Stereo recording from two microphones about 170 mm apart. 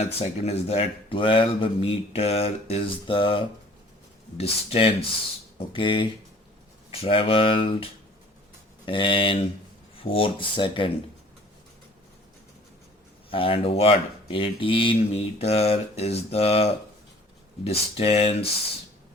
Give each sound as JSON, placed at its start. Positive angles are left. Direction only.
{"t": 0.0, "sound": "speech", "side_deg": 35}
{"t": 8.9, "sound": "speech", "side_deg": 30}
{"t": 13.3, "sound": "speech", "side_deg": 30}